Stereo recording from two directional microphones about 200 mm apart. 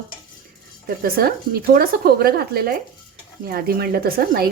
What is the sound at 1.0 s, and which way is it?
Speech, 50° right (ahead or behind).